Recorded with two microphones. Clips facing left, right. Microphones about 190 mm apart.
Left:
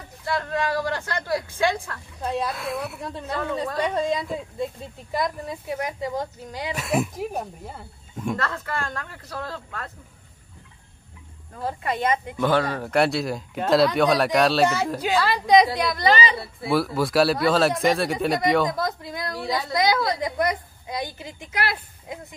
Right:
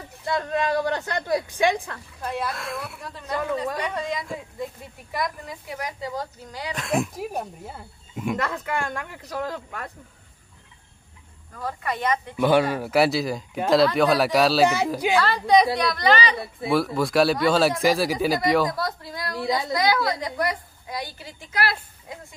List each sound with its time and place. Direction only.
0.2 s speech: 20° right (ahead or behind)
2.2 s a woman's voice: 25° left (ahead or behind)
2.5 s speech: 5° left (ahead or behind)
3.8 s a woman's voice: 25° left (ahead or behind)
6.7 s speech: 5° left (ahead or behind)
8.4 s speech: 15° right (ahead or behind)
11.5 s a woman's voice: 25° left (ahead or behind)
12.4 s speech: 10° right (ahead or behind)
15.1 s a woman's voice: 15° left (ahead or behind)
16.6 s speech: centre (ahead or behind)
18.7 s a woman's voice: 20° left (ahead or behind)